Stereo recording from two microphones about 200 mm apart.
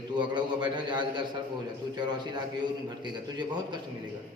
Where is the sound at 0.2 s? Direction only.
20° right (ahead or behind).